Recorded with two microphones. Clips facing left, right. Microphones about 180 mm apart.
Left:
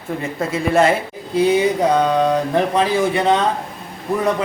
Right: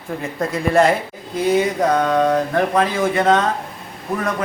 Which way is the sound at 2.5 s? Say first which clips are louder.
Left 1 dB; 20° left (ahead or behind).